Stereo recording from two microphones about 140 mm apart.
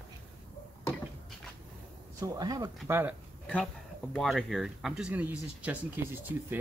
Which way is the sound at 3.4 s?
10° left (ahead or behind).